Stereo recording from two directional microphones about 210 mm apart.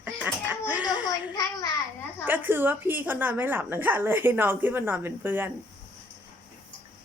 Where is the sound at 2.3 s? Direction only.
10° right (ahead or behind).